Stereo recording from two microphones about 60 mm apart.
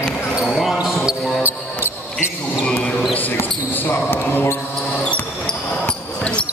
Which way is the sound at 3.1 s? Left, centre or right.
Left.